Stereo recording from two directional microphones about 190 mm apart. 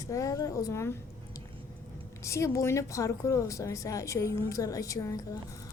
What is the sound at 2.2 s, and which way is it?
Speech, 15° left (ahead or behind).